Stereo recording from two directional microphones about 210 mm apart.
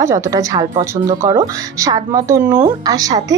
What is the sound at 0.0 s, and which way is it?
Speech, 15° right (ahead or behind).